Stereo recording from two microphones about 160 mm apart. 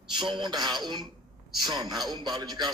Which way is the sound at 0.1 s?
30° right (ahead or behind).